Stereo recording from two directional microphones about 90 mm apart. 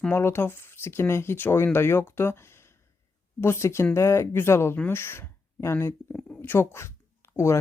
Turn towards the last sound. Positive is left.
turn(degrees=30)  # may be behind; listen again after turning